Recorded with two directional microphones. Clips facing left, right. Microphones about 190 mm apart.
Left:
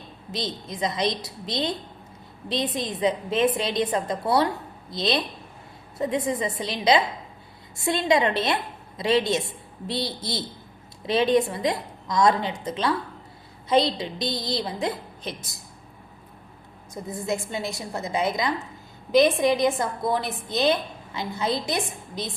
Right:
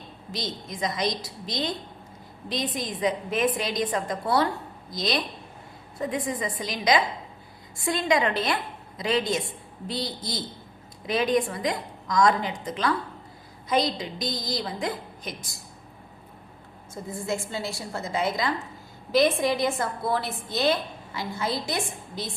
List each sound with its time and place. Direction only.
0.3 s a woman's voice: 20° left (ahead or behind)
2.7 s a woman's voice: 25° left (ahead or behind)
16.9 s a woman's voice: 20° left (ahead or behind)